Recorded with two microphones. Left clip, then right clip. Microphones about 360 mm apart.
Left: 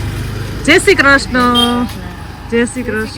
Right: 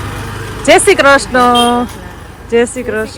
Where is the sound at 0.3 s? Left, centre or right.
Right.